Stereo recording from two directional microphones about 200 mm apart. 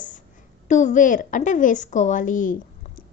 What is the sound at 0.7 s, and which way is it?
A woman's voice, 35° left (ahead or behind).